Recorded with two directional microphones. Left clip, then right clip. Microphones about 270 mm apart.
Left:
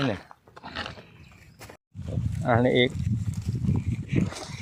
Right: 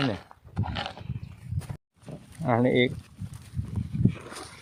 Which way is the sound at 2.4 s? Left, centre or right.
Centre.